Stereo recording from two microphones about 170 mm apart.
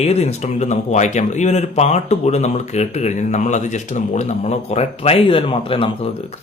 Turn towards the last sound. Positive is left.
turn(degrees=30)  # may be behind; listen again after turning